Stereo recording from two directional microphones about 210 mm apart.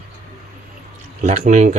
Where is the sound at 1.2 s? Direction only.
35° right (ahead or behind).